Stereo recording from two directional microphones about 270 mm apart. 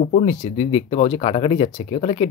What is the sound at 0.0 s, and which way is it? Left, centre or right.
Speech, left.